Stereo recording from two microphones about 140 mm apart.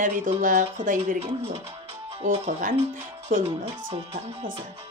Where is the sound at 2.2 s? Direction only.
70° right (ahead or behind).